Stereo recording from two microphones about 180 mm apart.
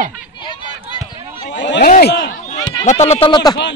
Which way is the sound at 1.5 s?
75° left (ahead or behind).